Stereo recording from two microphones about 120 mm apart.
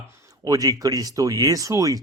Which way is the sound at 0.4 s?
30° right (ahead or behind).